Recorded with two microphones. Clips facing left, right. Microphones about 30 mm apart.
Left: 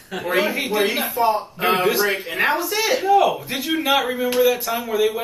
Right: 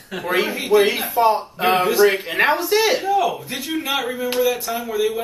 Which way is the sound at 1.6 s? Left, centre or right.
Centre.